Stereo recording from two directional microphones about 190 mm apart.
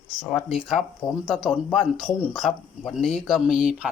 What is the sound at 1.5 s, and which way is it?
Speech, 5° right (ahead or behind).